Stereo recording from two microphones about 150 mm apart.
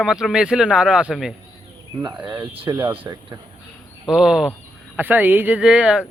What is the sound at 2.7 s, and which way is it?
Speech, 15° right (ahead or behind).